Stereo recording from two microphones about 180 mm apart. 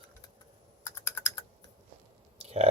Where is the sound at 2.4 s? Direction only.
35° right (ahead or behind).